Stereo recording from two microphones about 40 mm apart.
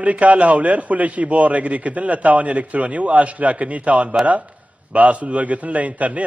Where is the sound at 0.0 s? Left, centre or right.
Right.